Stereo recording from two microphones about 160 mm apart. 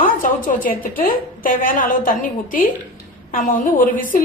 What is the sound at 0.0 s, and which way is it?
A woman's voice, 60° left (ahead or behind).